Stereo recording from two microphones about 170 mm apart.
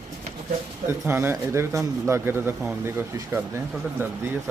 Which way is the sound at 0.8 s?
15° right (ahead or behind).